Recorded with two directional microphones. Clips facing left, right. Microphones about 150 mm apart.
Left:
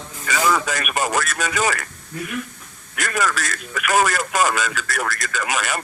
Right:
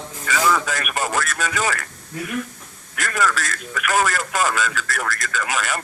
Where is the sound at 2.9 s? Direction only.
15° left (ahead or behind).